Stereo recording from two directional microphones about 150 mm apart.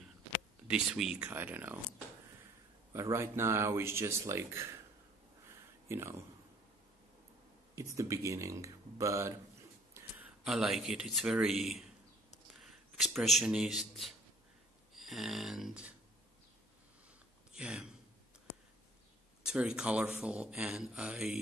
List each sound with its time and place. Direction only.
0.7 s speech: 5° right (ahead or behind)
2.9 s speech: 20° right (ahead or behind)
5.9 s speech: 15° right (ahead or behind)
7.7 s a man's voice: 20° right (ahead or behind); by 15.9 s 5° right (ahead or behind)
17.5 s a sound: 5° right (ahead or behind)
19.4 s speech: 5° right (ahead or behind)